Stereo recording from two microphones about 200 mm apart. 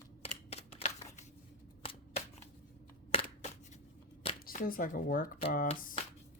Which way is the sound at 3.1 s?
25° left (ahead or behind).